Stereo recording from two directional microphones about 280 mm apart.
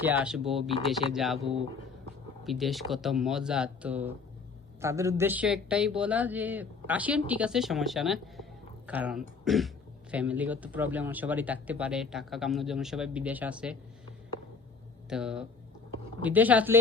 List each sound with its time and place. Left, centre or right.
0.0 s speech: centre
2.4 s speech: centre
15.1 s speech: centre